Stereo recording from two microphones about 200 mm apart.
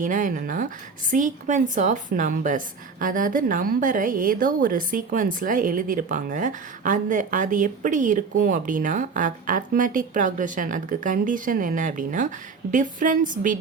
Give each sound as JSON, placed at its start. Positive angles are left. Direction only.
{"t": 0.0, "sound": "a woman's voice", "side_deg": -40}